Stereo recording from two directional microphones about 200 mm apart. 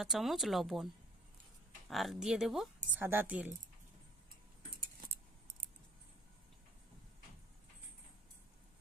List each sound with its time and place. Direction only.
0.0 s speech: centre (ahead or behind)
1.9 s speech: centre (ahead or behind)
4.7 s keys jangling: 50° right (ahead or behind)